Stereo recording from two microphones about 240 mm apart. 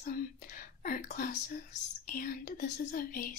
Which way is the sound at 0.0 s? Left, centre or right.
Left.